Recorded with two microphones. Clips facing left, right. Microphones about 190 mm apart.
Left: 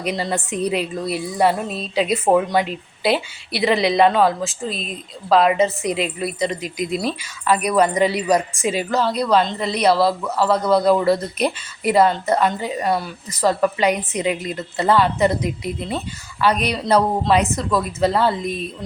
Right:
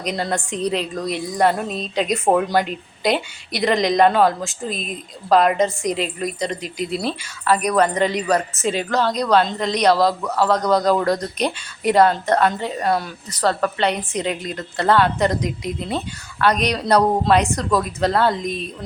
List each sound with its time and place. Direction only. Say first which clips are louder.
0.0 s speech: even; 5° left (ahead or behind)
6.5 s speech: left 1 dB; 35° right (ahead or behind)
7.0 s a woman's voice: left 1 dB; 10° left (ahead or behind)